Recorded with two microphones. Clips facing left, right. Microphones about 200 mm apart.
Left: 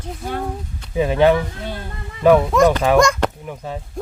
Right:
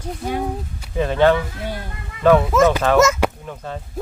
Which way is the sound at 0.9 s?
10° left (ahead or behind).